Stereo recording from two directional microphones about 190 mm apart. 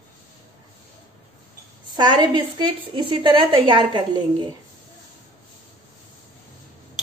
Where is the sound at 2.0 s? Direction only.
25° right (ahead or behind).